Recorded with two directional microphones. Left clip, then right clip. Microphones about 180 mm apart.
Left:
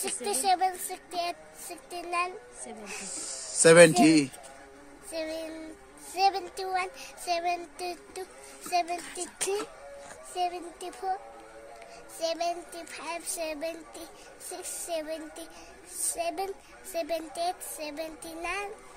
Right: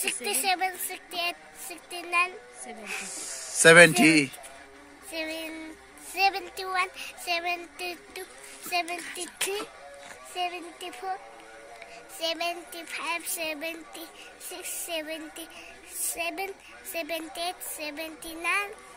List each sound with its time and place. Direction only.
0.0 s a child's voice: 25° left (ahead or behind)
3.6 s speech: 5° right (ahead or behind)
5.1 s a child's voice: 25° left (ahead or behind)
12.2 s a child's voice: 20° left (ahead or behind)